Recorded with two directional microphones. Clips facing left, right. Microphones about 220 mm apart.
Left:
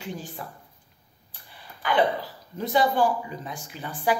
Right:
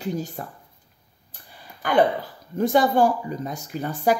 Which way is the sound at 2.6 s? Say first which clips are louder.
Right 4 dB; 45° right (ahead or behind).